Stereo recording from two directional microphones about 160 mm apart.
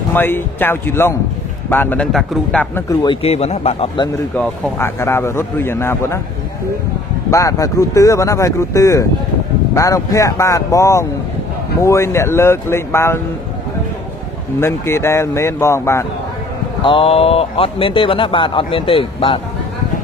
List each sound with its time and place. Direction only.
0.1 s a man's voice: 10° left (ahead or behind)
3.1 s speech: 40° left (ahead or behind)
4.4 s a man's voice: 15° left (ahead or behind)
7.2 s a man's voice: 20° left (ahead or behind)
14.6 s a man's voice: 15° left (ahead or behind)
16.8 s speech: 35° left (ahead or behind)